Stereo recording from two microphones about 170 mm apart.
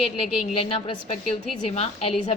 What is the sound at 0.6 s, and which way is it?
A woman's voice, 35° left (ahead or behind).